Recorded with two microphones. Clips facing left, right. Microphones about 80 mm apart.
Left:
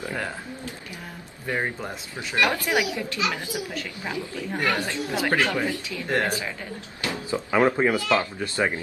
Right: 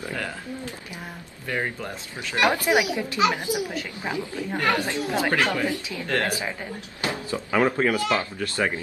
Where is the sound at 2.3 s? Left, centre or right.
Right.